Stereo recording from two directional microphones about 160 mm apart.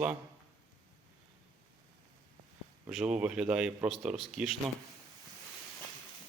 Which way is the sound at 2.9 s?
5° right (ahead or behind).